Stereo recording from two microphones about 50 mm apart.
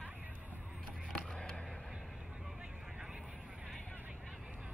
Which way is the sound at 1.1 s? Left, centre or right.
Centre.